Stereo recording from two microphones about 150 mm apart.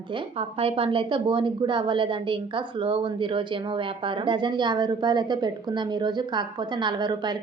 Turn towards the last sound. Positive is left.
turn(degrees=-30)  # may be behind; listen again after turning